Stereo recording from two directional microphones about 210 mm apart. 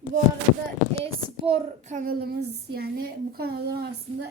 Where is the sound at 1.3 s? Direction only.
25° right (ahead or behind); by 3.9 s 50° right (ahead or behind).